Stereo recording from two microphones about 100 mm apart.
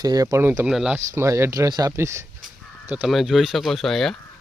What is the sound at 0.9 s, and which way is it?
Speech, 25° right (ahead or behind).